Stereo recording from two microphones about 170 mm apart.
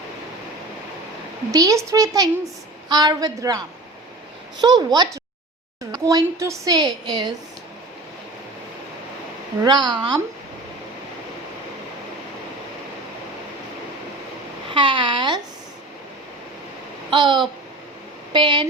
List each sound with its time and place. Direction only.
1.5 s a woman's voice: 20° right (ahead or behind)
4.6 s a woman's voice: 25° right (ahead or behind)
5.9 s a sound: 20° right (ahead or behind)
6.4 s a woman's voice: 20° right (ahead or behind)
9.6 s a woman's voice: 25° right (ahead or behind)
14.7 s a woman's voice: 30° right (ahead or behind)
17.1 s a woman's voice: 25° right (ahead or behind)